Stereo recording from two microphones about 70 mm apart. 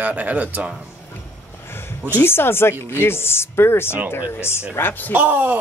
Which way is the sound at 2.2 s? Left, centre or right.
Left.